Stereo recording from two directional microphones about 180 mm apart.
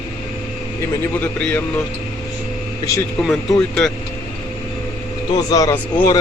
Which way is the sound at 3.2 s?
5° left (ahead or behind).